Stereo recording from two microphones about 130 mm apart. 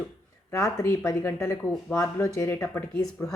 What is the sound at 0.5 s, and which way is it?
Speech, 20° left (ahead or behind).